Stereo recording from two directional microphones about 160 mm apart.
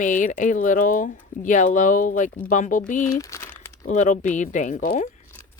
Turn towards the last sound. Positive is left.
turn(degrees=50)  # may be behind; listen again after turning